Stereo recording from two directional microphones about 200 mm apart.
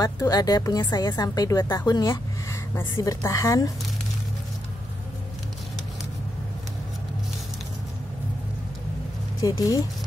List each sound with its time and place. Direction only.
0.0 s a woman's voice: 20° left (ahead or behind)
9.4 s a woman's voice: 15° left (ahead or behind)